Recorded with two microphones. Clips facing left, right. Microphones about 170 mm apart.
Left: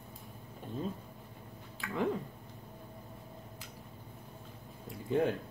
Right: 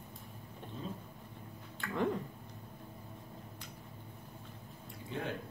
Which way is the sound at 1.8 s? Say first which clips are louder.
Even; centre (ahead or behind).